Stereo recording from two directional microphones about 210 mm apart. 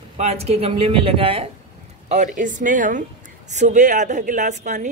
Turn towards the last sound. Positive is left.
turn(degrees=-35)  # may be behind; listen again after turning